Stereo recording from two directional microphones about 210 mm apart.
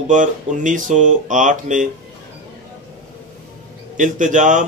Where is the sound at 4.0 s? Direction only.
35° right (ahead or behind).